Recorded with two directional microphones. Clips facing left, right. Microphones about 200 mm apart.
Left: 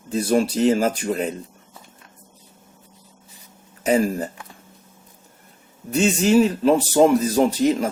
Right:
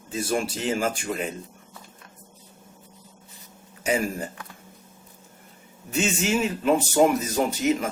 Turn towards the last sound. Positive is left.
turn(degrees=30)  # may be behind; listen again after turning